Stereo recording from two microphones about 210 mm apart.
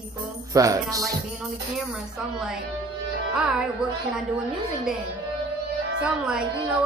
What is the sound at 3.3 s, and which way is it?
Speech, 5° right (ahead or behind).